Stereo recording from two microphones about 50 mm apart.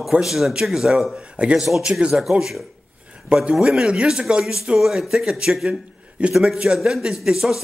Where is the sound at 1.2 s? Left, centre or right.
Right.